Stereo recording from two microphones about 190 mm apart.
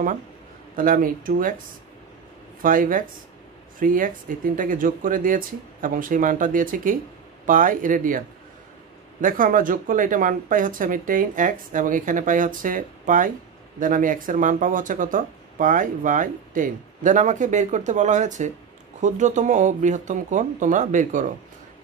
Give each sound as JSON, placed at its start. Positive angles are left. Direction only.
{"t": 0.7, "sound": "speech", "side_deg": -45}
{"t": 2.6, "sound": "speech", "side_deg": -45}
{"t": 9.2, "sound": "speech", "side_deg": -45}